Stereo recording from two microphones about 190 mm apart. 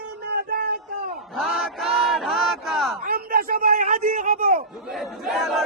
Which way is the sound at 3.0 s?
50° right (ahead or behind).